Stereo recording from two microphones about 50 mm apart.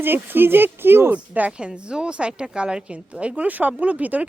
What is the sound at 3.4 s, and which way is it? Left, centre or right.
Speech, right.